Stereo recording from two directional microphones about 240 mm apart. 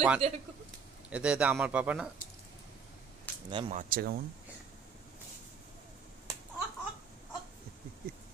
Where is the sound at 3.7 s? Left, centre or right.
Right.